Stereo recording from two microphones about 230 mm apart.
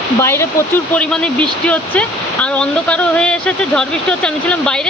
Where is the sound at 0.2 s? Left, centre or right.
Centre.